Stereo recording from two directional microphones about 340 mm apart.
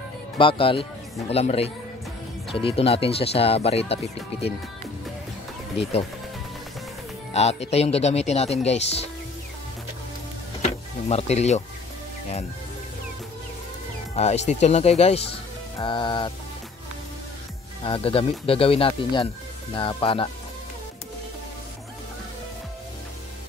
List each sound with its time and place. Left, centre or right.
0.4 s speech: centre
7.3 s speech: centre
10.6 s speech: centre
14.1 s speech: centre
17.8 s speech: centre